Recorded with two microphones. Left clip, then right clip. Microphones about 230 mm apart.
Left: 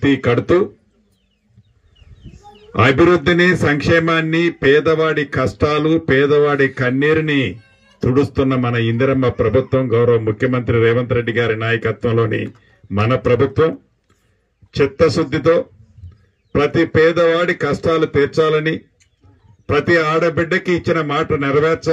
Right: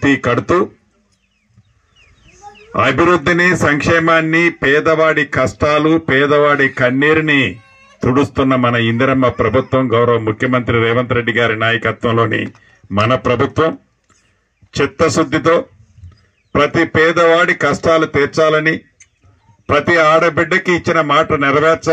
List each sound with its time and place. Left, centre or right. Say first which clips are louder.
0.0 s a man's voice: right 2 dB; right
2.7 s a man's voice: right 1 dB; right
15.2 s a man's voice: right 2 dB; right
16.6 s a man's voice: right 1 dB; right
19.9 s a man's voice: right 5 dB; right